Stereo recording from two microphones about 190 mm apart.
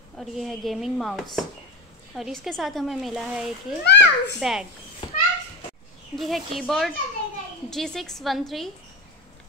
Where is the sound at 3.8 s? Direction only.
65° left (ahead or behind).